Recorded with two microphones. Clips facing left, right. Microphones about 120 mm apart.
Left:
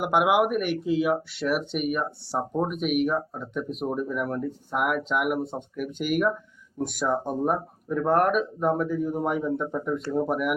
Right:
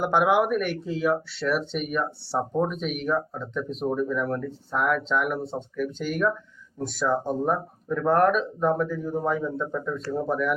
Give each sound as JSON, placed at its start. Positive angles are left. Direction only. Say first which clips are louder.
{"t": 0.0, "sound": "speech", "louder": "even", "side_deg": 10}